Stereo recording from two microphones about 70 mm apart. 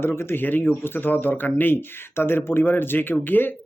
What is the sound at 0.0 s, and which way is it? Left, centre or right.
Speech, left.